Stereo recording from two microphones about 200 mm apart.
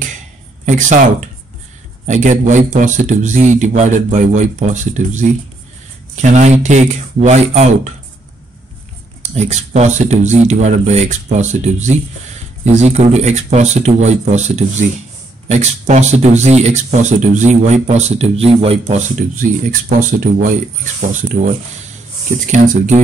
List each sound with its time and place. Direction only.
0.7 s a man's voice: 40° right (ahead or behind)
2.0 s a man's voice: 35° right (ahead or behind)
6.3 s a man's voice: 35° right (ahead or behind)
9.2 s a man's voice: 35° right (ahead or behind)